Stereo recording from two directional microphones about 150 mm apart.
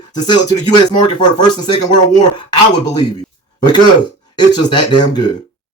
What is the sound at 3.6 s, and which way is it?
Speech, 30° left (ahead or behind).